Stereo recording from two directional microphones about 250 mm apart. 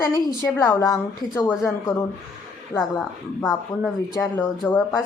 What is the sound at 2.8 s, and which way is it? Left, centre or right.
Speech, centre.